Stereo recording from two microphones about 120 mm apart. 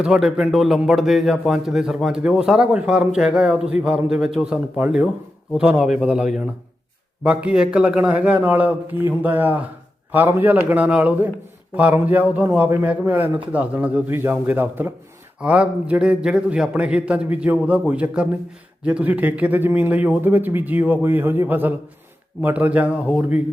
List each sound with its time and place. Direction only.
0.0 s speech: 5° right (ahead or behind)